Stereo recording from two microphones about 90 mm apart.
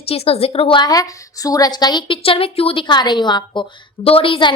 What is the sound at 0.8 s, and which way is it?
A woman's voice, 45° left (ahead or behind).